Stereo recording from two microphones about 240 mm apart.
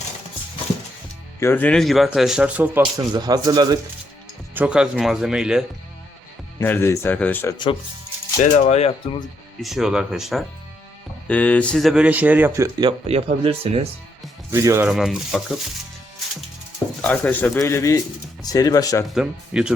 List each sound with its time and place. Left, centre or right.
1.4 s a man's voice: centre
4.5 s a man's voice: centre
6.6 s speech: centre
8.5 s speech: left
9.6 s a man's voice: centre
13.1 s speech: right
14.5 s a man's voice: centre
17.0 s speech: centre
19.0 s a man's voice: centre